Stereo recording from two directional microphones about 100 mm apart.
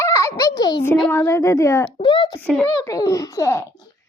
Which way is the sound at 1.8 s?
55° left (ahead or behind).